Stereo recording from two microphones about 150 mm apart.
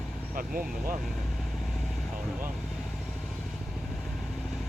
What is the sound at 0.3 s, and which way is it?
Speech, 65° right (ahead or behind).